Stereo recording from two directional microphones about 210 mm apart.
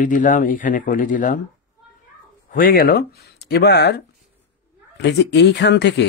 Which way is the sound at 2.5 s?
45° left (ahead or behind).